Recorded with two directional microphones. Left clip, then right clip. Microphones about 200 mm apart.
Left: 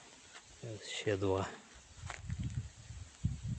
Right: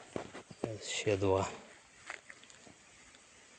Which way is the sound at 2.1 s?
40° right (ahead or behind).